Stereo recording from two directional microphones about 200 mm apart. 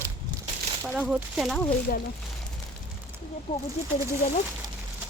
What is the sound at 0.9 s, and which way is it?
Speech, 5° right (ahead or behind).